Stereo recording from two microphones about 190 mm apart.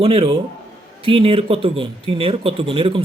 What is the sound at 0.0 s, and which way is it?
A man's voice, 30° right (ahead or behind).